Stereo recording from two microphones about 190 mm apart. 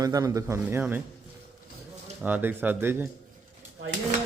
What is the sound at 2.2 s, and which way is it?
Speech, 10° right (ahead or behind).